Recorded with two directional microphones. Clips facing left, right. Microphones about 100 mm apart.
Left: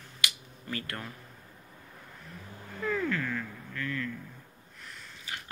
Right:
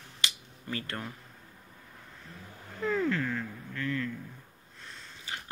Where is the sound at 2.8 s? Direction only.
25° right (ahead or behind).